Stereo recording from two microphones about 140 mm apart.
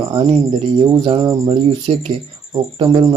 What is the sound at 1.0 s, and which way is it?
Speech, 35° right (ahead or behind).